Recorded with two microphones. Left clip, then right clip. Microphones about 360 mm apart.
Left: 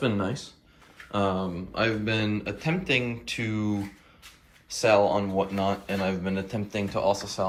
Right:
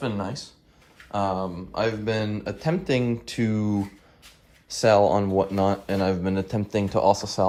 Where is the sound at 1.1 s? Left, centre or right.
Centre.